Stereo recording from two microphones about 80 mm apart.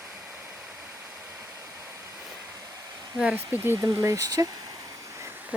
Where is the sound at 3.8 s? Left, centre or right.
Right.